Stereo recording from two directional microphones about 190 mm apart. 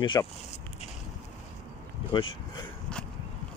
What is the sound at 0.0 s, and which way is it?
Speech, 25° left (ahead or behind).